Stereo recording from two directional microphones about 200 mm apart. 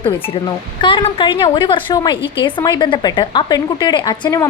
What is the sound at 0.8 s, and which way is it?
A woman's voice, 25° left (ahead or behind).